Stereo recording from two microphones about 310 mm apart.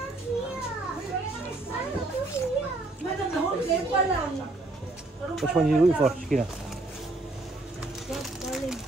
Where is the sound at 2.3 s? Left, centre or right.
Centre.